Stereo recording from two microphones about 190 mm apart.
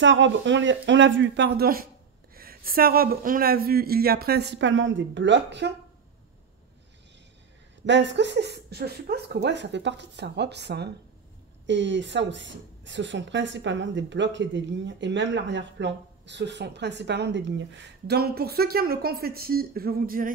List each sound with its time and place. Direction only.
0.0 s speech: 75° right (ahead or behind)
7.8 s speech: 70° right (ahead or behind)
18.0 s speech: 55° right (ahead or behind)